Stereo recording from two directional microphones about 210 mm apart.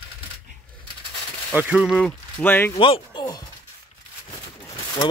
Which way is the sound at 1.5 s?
5° right (ahead or behind).